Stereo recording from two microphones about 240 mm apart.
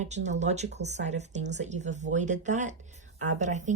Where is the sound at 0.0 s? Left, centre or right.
Right.